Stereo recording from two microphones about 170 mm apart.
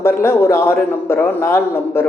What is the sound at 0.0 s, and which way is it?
A man's voice, 15° left (ahead or behind).